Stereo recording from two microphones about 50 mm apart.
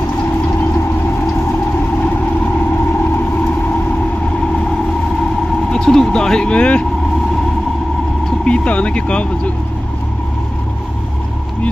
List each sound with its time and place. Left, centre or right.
5.7 s vehicle: centre
8.5 s speech: left